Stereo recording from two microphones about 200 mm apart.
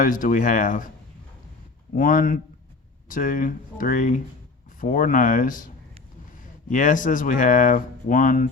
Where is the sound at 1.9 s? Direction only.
45° left (ahead or behind).